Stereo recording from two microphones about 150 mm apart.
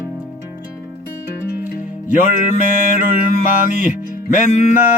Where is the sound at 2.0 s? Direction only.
60° left (ahead or behind).